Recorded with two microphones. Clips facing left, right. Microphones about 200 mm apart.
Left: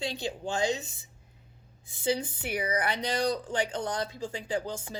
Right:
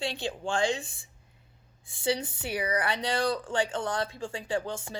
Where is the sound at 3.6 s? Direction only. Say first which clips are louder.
Right 1 dB; 40° left (ahead or behind).